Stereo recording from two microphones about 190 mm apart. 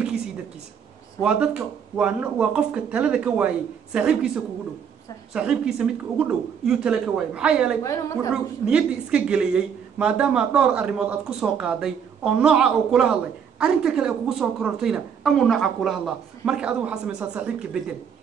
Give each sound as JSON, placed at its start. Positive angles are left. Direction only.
{"t": 1.2, "sound": "a woman's voice", "side_deg": -5}
{"t": 5.3, "sound": "a woman's voice", "side_deg": -5}
{"t": 7.8, "sound": "a woman's voice", "side_deg": 15}
{"t": 8.3, "sound": "a woman's voice", "side_deg": -5}